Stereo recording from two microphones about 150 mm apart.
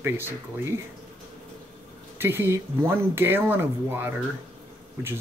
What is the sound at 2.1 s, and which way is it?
Speech, 15° right (ahead or behind).